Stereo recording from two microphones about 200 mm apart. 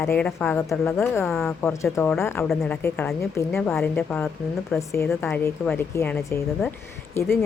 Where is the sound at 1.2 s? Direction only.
Centre (ahead or behind).